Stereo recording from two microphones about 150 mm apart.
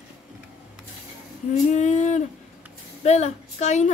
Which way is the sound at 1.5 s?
50° left (ahead or behind).